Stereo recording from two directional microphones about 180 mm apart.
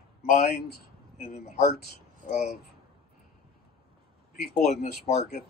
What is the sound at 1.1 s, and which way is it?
Speech, 55° left (ahead or behind).